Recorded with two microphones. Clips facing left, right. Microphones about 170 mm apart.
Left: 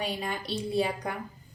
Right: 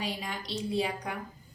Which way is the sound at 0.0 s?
55° left (ahead or behind).